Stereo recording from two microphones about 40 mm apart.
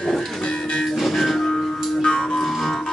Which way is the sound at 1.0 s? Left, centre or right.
Centre.